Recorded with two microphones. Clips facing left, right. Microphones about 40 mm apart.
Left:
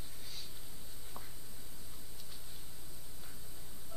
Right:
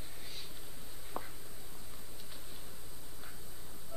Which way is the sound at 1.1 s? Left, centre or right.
Right.